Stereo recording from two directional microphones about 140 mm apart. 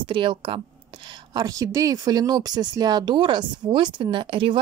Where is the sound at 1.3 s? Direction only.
25° right (ahead or behind).